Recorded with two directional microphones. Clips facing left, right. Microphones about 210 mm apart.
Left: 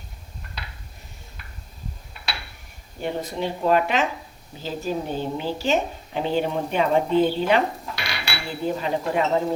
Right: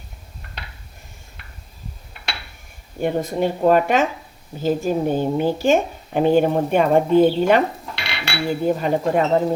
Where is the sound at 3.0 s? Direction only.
50° right (ahead or behind).